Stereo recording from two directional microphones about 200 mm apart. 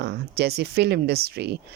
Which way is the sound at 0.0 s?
55° right (ahead or behind).